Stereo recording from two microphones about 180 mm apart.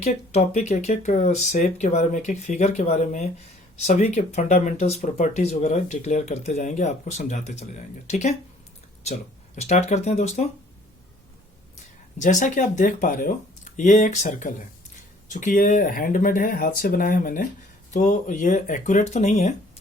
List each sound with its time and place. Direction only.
0.0 s speech: 35° left (ahead or behind)
9.6 s speech: 40° left (ahead or behind)
11.8 s speech: 45° left (ahead or behind)